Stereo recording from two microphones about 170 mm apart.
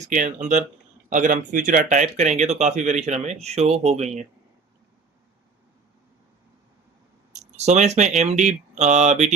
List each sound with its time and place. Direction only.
0.0 s speech: 45° right (ahead or behind)
7.3 s speech: 40° right (ahead or behind)